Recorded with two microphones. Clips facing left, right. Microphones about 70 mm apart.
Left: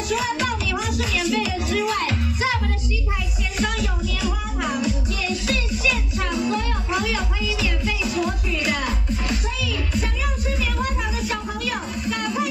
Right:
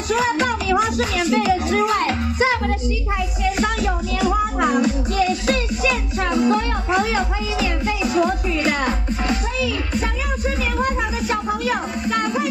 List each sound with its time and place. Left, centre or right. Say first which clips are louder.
0.1 s music: right 5 dB; right
10.8 s music: right 4 dB; right